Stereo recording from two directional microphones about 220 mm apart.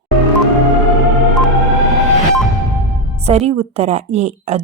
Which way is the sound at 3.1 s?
30° right (ahead or behind).